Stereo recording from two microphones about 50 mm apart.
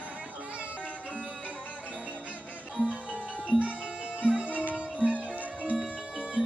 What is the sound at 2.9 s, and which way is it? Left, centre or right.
Music, right.